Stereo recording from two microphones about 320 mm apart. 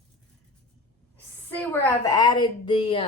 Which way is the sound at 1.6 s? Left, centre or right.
Centre.